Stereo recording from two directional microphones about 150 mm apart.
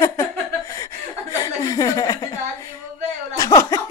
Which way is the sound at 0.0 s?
20° left (ahead or behind).